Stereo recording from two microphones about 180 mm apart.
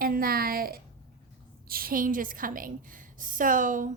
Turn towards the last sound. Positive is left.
turn(degrees=-50)  # may be behind; listen again after turning